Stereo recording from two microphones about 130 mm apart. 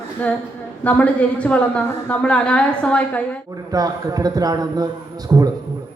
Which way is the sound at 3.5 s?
30° right (ahead or behind).